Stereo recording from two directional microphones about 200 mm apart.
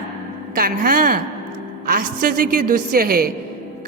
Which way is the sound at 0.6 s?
45° right (ahead or behind).